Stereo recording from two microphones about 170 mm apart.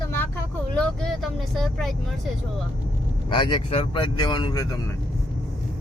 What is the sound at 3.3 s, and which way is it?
Speech, 30° left (ahead or behind).